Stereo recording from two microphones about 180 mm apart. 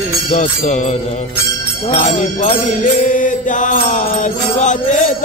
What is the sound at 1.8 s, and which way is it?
Mantra, 40° left (ahead or behind).